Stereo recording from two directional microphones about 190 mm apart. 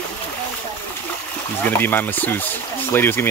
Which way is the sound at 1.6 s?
10° left (ahead or behind).